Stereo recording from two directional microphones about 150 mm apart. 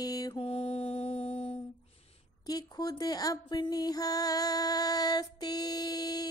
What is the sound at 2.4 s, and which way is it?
Speech, 25° left (ahead or behind).